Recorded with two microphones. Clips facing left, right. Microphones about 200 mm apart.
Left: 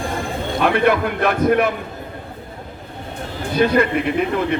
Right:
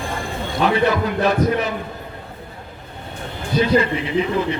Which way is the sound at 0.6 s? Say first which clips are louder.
Left 1 dB; 55° left (ahead or behind).